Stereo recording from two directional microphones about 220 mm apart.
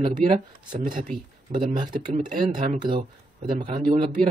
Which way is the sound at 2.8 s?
20° right (ahead or behind).